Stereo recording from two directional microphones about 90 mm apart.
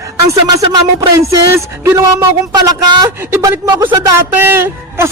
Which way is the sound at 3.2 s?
25° right (ahead or behind).